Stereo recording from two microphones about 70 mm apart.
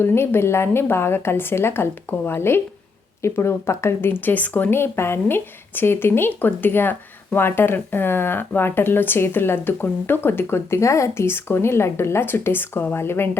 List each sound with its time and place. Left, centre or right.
0.0 s speech: left
4.7 s speech: left